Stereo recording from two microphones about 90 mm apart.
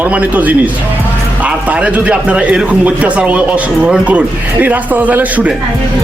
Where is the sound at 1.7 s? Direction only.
15° right (ahead or behind).